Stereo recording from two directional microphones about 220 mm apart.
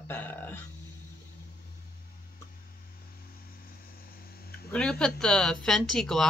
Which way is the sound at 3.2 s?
40° left (ahead or behind).